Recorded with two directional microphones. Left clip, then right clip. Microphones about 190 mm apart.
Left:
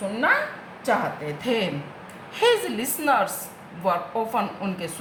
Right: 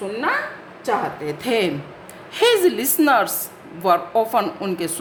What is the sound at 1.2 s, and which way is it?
A woman's voice, 45° right (ahead or behind).